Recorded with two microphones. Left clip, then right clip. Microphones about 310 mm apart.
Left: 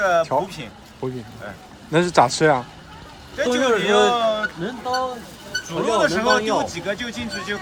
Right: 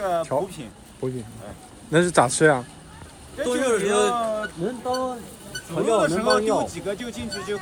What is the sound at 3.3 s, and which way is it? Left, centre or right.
Speech, left.